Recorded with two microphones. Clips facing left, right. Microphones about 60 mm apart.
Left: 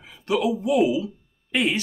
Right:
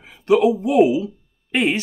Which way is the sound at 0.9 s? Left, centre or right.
Right.